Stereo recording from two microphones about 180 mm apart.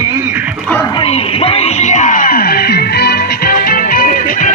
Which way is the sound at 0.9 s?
35° left (ahead or behind).